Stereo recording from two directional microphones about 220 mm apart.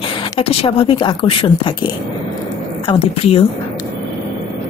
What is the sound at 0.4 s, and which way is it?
Speech, 25° left (ahead or behind).